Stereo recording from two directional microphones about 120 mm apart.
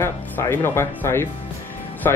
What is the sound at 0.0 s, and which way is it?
Speech, 20° left (ahead or behind).